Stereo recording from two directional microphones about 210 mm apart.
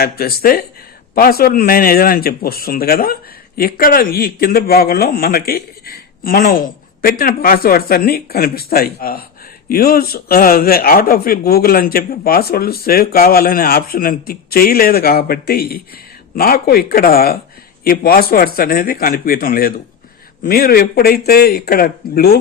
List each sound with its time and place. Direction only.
0.0 s a man's voice: 45° left (ahead or behind)